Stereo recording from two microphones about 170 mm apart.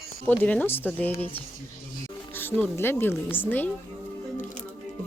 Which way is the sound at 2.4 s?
10° left (ahead or behind).